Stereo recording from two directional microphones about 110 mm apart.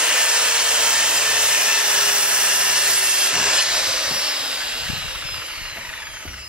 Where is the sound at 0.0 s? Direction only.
10° right (ahead or behind).